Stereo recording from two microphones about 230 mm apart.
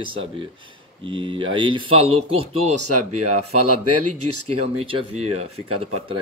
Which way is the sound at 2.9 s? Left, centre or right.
Right.